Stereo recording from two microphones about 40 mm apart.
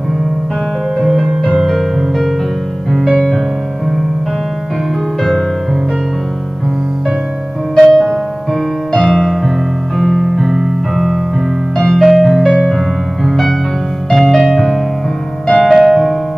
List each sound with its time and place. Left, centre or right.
1.6 s music: centre
7.7 s music: centre
9.9 s keyboard: centre
11.8 s piano: centre
12.6 s music: centre
15.6 s piano: centre